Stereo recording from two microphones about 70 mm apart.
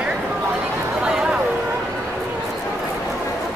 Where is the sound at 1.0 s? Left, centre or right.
Centre.